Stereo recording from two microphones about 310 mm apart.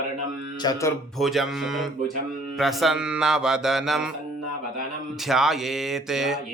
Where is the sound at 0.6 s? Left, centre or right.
Centre.